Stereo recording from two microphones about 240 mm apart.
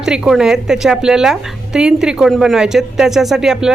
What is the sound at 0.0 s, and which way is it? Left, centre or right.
Speech, centre.